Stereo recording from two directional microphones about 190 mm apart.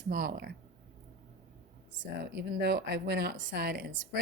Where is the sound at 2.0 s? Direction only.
60° right (ahead or behind).